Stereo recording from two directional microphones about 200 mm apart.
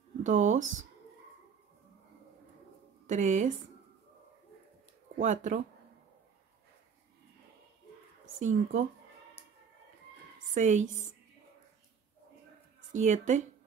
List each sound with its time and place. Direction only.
0.2 s speech: 35° right (ahead or behind)
3.1 s speech: 35° right (ahead or behind)
5.2 s speech: 35° right (ahead or behind)
8.4 s speech: 40° right (ahead or behind)
10.5 s a woman's voice: 35° right (ahead or behind)
12.9 s speech: 35° right (ahead or behind)